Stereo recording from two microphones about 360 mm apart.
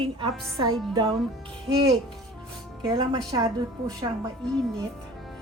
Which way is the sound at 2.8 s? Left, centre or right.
Centre.